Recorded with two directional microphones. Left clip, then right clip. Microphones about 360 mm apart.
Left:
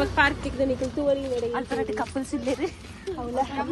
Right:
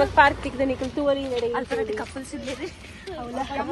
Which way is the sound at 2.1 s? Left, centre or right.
Left.